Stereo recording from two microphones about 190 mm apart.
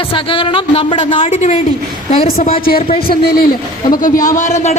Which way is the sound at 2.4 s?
50° left (ahead or behind).